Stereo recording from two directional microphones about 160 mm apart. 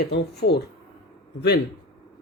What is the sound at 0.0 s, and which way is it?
Speech, 85° left.